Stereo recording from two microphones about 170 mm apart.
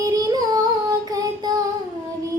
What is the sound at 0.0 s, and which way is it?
Female singing, 20° right (ahead or behind).